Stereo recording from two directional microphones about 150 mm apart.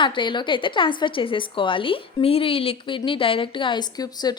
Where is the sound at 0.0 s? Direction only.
30° left (ahead or behind).